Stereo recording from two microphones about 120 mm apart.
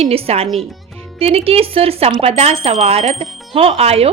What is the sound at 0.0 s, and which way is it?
Speech, 55° right (ahead or behind).